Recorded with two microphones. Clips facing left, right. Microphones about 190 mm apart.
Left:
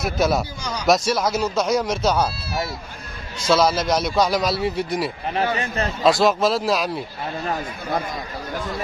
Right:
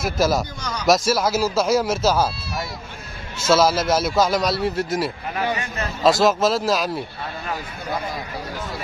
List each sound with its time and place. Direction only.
0.0 s speech: centre (ahead or behind)
5.3 s a man's voice: 35° left (ahead or behind)
6.0 s speech: centre (ahead or behind)